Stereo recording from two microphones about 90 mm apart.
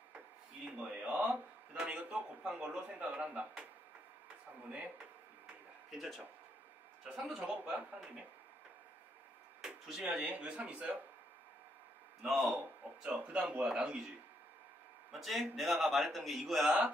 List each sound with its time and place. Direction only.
0.7 s a sound: 15° right (ahead or behind)
1.7 s a man's voice: 10° right (ahead or behind)
5.9 s a man's voice: centre (ahead or behind)
9.6 s a sound: 5° right (ahead or behind)
10.0 s a man's voice: 15° right (ahead or behind)
12.2 s a man's voice: centre (ahead or behind)
13.0 s a man's voice: 10° right (ahead or behind)